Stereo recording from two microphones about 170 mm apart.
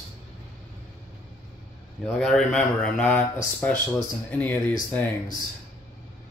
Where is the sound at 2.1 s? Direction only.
5° left (ahead or behind).